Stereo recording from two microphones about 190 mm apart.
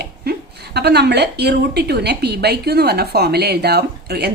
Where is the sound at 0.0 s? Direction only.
60° right (ahead or behind).